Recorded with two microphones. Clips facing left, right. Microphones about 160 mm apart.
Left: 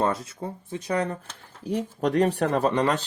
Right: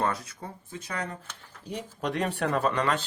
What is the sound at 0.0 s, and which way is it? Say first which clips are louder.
Speech: left 4 dB; 25° left (ahead or behind).